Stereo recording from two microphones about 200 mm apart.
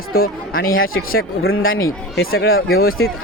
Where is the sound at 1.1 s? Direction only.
90° left.